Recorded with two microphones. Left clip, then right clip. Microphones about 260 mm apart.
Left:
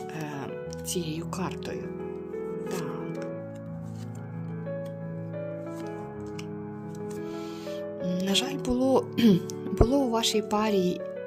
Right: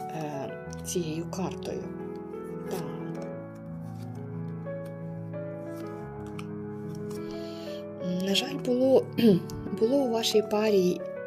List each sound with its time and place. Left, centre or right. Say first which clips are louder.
0.9 s speech: right 2 dB; left
8.0 s music: left 1 dB; left